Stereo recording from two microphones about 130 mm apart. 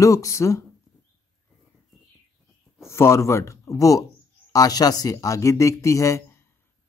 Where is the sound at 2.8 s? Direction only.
20° left (ahead or behind).